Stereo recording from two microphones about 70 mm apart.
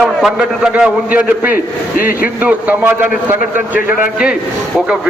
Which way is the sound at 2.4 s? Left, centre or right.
Right.